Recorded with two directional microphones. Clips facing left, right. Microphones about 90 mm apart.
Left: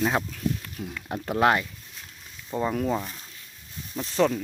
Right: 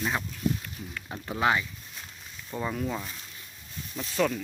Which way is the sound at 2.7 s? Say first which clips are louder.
Left 5 dB; 40° left (ahead or behind).